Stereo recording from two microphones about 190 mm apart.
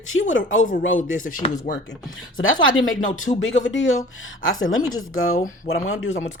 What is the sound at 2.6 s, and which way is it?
Speech, 90° left.